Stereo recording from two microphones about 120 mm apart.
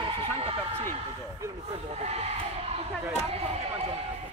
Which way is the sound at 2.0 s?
65° right (ahead or behind).